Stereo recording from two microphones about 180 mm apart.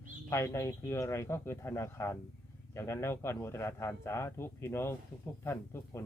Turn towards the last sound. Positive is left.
turn(degrees=15)  # may be behind; listen again after turning